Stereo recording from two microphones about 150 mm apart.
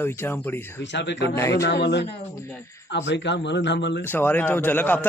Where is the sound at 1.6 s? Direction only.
90° left.